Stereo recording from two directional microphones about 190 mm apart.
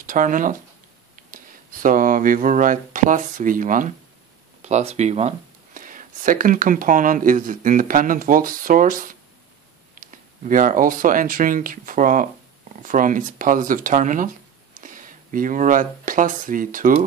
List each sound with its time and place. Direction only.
0.0 s speech: 45° right (ahead or behind)